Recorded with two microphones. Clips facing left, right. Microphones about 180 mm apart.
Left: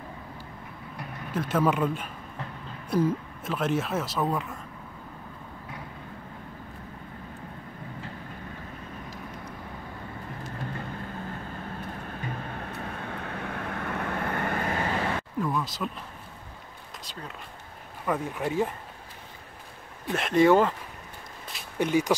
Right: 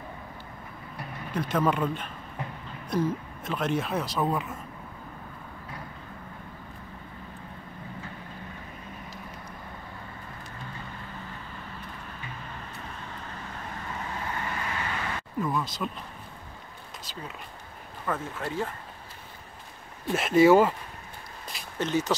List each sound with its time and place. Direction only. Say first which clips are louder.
0.9 s speech: even; 5° left (ahead or behind)
11.3 s vehicle: left 5 dB; 50° left (ahead or behind)
15.4 s a sound: right 1 dB; centre (ahead or behind)
17.0 s a sound: right 1 dB; centre (ahead or behind)
18.0 s speech: left 3 dB; 15° left (ahead or behind)
20.1 s speech: right 1 dB; 5° right (ahead or behind)
21.7 s speech: left 3 dB; 10° left (ahead or behind)